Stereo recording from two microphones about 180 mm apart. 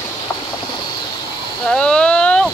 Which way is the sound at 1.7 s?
5° left (ahead or behind).